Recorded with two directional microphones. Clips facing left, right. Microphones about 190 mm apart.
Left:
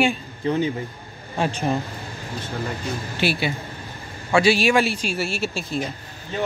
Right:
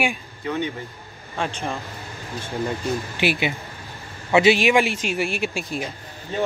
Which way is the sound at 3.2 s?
15° right (ahead or behind).